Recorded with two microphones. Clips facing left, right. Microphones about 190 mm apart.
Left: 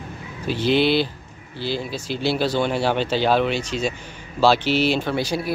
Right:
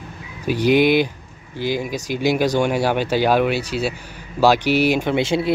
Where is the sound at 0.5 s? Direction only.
15° right (ahead or behind).